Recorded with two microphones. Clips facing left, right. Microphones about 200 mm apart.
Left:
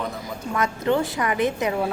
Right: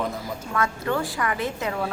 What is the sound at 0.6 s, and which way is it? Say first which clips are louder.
A woman's voice: left 4 dB; 20° left (ahead or behind).